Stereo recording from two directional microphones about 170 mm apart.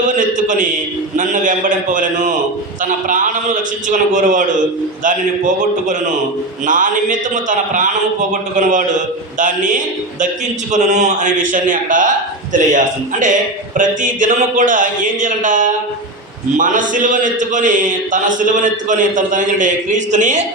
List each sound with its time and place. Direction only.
0.0 s a man's voice: 50° right (ahead or behind)
6.7 s a man's voice: 50° right (ahead or behind)